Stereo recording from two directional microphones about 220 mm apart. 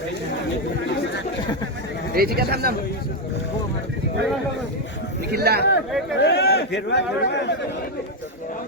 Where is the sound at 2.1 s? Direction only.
45° right (ahead or behind).